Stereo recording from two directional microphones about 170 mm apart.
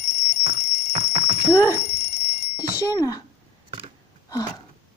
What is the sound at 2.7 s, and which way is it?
Speech, 20° left (ahead or behind).